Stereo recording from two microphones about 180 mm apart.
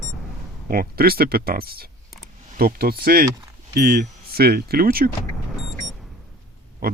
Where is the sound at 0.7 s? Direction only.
55° right (ahead or behind).